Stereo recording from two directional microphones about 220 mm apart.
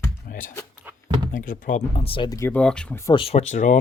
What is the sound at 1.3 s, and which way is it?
Speech, 40° left (ahead or behind).